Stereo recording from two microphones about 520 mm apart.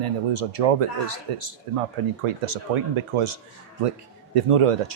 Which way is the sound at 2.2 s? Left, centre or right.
Right.